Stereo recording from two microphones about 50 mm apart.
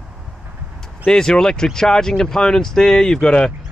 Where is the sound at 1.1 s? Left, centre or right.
Centre.